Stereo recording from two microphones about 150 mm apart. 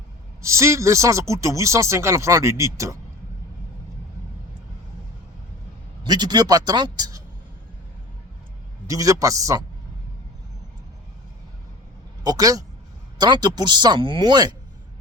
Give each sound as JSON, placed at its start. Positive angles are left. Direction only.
{"t": 0.4, "sound": "speech", "side_deg": -20}
{"t": 6.0, "sound": "speech", "side_deg": -30}
{"t": 8.9, "sound": "speech", "side_deg": -20}
{"t": 12.2, "sound": "speech", "side_deg": -25}